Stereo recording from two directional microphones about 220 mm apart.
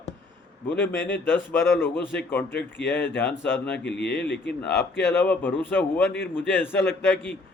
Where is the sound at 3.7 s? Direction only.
50° left (ahead or behind).